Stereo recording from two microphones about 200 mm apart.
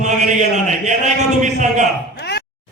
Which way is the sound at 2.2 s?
55° left (ahead or behind).